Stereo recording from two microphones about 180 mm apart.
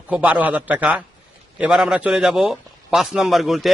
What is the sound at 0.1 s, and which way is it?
A man's voice, 10° right (ahead or behind).